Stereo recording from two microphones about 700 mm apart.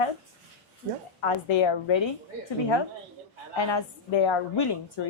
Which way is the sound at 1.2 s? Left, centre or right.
Left.